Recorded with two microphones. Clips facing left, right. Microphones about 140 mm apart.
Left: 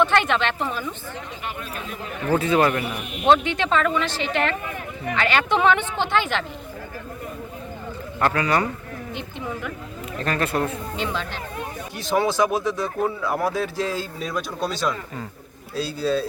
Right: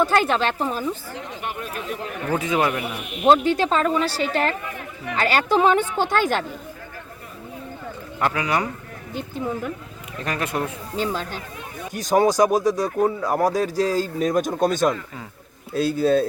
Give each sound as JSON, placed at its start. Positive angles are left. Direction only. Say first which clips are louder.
{"t": 0.0, "sound": "speech", "louder": "right 1 dB", "side_deg": -35}
{"t": 2.3, "sound": "a man's voice", "louder": "left 3 dB", "side_deg": -15}
{"t": 3.3, "sound": "speech", "louder": "right 2 dB", "side_deg": -35}
{"t": 8.2, "sound": "a man's voice", "louder": "left 1 dB", "side_deg": -10}
{"t": 9.1, "sound": "speech", "louder": "right 6 dB", "side_deg": -40}
{"t": 10.2, "sound": "a man's voice", "louder": "left 2 dB", "side_deg": -15}
{"t": 10.9, "sound": "speech", "louder": "right 2 dB", "side_deg": -40}